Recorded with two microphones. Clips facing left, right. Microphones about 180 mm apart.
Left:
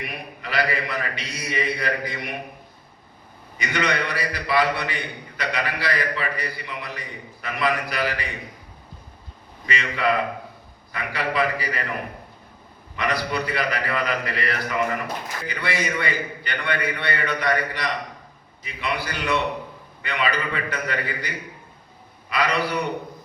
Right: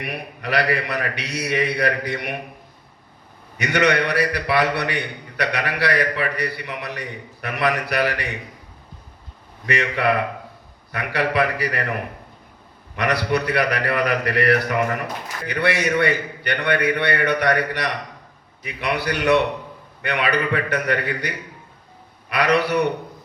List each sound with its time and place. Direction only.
0.0 s a man's voice: 70° right (ahead or behind)
3.6 s a man's voice: 70° right (ahead or behind)
9.6 s a man's voice: 70° right (ahead or behind)
13.0 s a man's voice: 70° right (ahead or behind)